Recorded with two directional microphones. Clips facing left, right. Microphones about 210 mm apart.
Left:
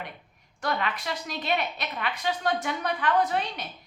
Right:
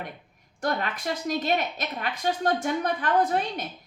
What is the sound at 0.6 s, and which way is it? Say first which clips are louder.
Speech: right 2 dB; 45° right (ahead or behind).